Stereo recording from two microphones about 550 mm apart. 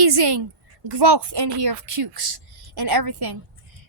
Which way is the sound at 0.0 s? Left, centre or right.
Right.